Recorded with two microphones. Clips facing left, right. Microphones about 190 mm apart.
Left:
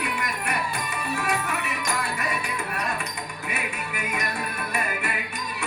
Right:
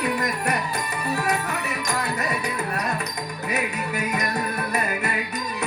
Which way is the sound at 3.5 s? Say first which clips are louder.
Right 7 dB; 40° right (ahead or behind).